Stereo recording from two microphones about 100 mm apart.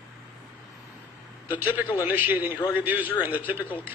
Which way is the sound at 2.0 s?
15° right (ahead or behind).